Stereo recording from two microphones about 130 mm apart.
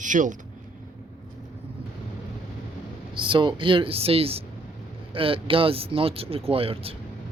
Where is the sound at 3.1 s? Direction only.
40° right (ahead or behind).